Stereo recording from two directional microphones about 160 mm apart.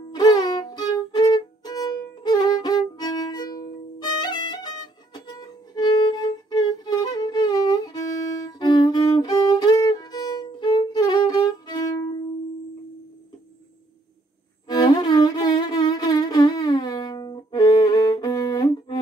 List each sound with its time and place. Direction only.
0.1 s music: 25° left (ahead or behind)
14.7 s music: 25° left (ahead or behind)